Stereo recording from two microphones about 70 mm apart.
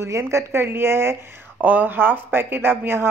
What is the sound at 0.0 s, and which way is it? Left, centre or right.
Speech, right.